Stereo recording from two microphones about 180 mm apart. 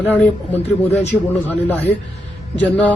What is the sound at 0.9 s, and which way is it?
Speech, 40° left (ahead or behind).